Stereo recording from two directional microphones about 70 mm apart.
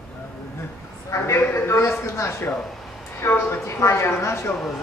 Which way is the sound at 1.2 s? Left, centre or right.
Left.